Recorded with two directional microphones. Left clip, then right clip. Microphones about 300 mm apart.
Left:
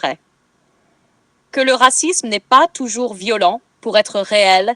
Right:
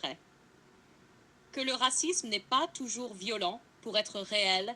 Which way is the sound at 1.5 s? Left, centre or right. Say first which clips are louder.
Left 19 dB; left.